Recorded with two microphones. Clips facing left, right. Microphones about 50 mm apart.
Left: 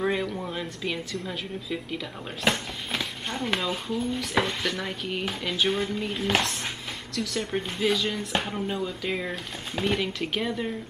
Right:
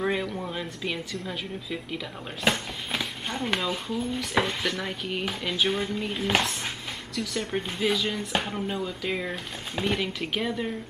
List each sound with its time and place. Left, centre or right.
0.0 s speech: centre